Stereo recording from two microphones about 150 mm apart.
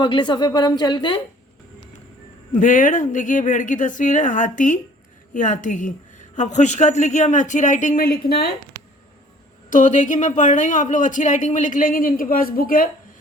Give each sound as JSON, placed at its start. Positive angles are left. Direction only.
{"t": 0.0, "sound": "speech", "side_deg": 30}
{"t": 2.5, "sound": "a woman's voice", "side_deg": 60}
{"t": 9.6, "sound": "a woman's voice", "side_deg": 55}